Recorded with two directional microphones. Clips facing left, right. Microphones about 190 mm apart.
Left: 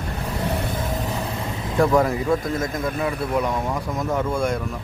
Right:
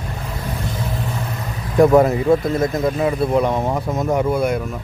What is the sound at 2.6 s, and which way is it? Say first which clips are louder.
Speech: right 6 dB; 30° right (ahead or behind).